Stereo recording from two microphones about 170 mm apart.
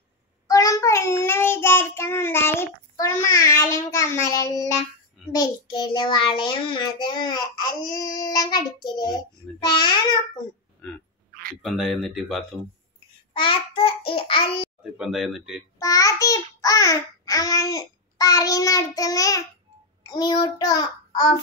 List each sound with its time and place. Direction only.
0.5 s child singing: 20° left (ahead or behind)
3.3 s babbling: 20° left (ahead or behind)
11.6 s speech: centre (ahead or behind)
13.3 s child singing: 30° left (ahead or behind)
14.8 s speech: 5° right (ahead or behind)
15.8 s babbling: 20° left (ahead or behind)